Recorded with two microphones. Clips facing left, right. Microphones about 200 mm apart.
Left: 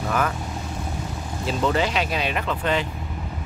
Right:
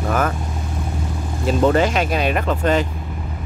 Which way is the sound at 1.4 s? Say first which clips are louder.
Right 7 dB; 50° right (ahead or behind).